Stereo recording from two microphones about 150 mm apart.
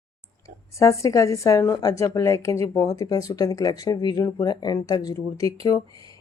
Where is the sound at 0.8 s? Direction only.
20° left (ahead or behind).